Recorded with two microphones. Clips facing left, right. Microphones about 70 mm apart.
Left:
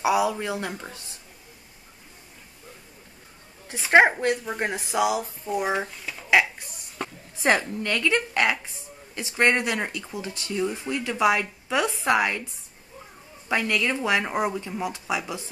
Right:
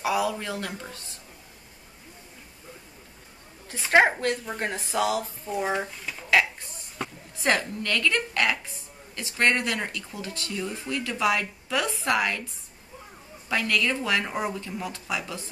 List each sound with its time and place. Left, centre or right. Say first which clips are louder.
0.0 s speech: left 3 dB; centre
3.6 s speech: left 3 dB; centre
7.0 s a sound: left 1 dB; centre
7.4 s speech: left 3 dB; centre
13.5 s speech: left 1 dB; centre